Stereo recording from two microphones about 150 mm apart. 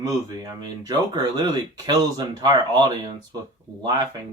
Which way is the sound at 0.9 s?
25° right (ahead or behind).